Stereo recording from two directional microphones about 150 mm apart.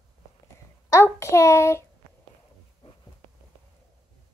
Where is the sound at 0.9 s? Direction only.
20° left (ahead or behind).